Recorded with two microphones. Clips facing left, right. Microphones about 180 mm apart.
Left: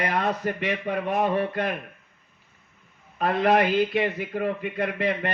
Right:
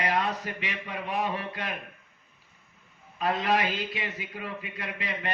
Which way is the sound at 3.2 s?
55° left (ahead or behind).